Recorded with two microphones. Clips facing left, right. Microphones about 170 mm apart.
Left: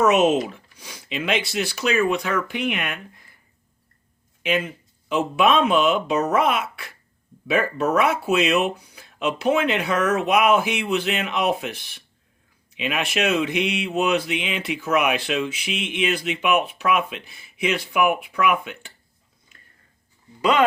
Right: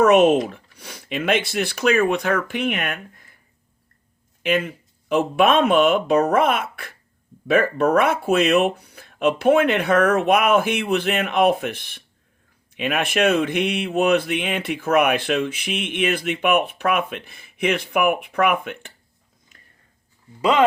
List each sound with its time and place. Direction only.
0.0 s speech: 55° right (ahead or behind)
4.4 s speech: 55° right (ahead or behind)
20.4 s speech: 30° right (ahead or behind)